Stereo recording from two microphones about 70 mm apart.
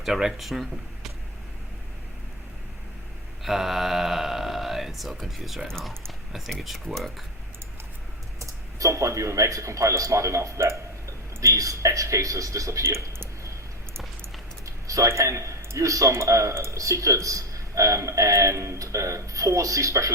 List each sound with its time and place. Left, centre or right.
0.0 s speech: centre
3.4 s speech: centre
5.6 s speech: centre
8.4 s a man's voice: right
14.6 s speech: right